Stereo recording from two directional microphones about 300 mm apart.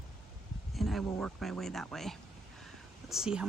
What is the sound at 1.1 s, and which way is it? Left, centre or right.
Speech, centre.